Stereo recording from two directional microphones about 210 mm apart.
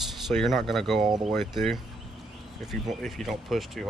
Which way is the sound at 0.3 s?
Centre (ahead or behind).